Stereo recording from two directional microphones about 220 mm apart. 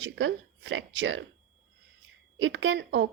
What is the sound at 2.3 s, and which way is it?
Speech, 60° right (ahead or behind).